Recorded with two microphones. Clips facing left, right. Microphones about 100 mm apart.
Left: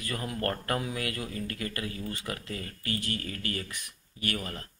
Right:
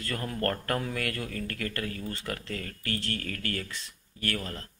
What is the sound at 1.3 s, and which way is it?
Speech, 55° right (ahead or behind).